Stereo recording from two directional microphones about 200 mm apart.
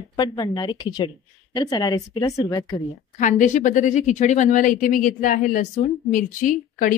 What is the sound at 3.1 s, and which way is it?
A woman's voice, 40° left (ahead or behind).